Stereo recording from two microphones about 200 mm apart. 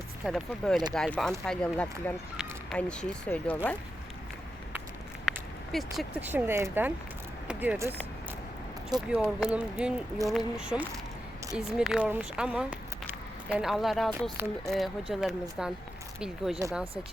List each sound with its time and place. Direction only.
0.3 s speech: centre (ahead or behind)
5.7 s speech: 5° right (ahead or behind)
9.0 s speech: 5° right (ahead or behind)
16.6 s speech: 15° right (ahead or behind)